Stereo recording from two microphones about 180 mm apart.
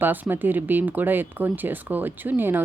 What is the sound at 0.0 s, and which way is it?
Speech, 10° right (ahead or behind).